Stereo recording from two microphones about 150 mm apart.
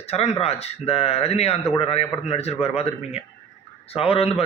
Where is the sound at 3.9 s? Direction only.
40° left (ahead or behind).